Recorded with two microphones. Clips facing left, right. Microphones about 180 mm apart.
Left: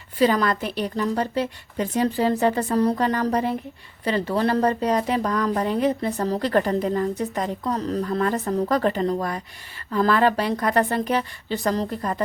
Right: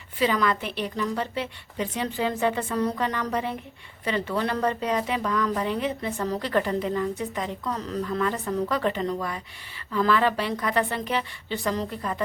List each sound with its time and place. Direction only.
0.2 s a woman's voice: 40° left (ahead or behind)